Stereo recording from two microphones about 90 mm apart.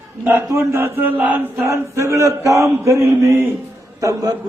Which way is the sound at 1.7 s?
35° right (ahead or behind).